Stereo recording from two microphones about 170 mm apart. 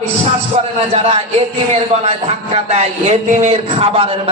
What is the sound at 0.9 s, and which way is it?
A man's voice, 40° right (ahead or behind).